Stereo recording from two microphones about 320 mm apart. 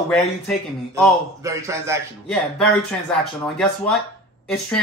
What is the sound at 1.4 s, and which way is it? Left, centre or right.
A man's voice, centre.